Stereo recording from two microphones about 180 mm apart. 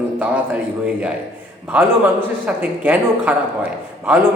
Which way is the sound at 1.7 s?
5° right (ahead or behind).